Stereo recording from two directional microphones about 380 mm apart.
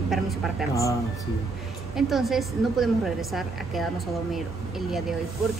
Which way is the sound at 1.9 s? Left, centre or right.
Centre.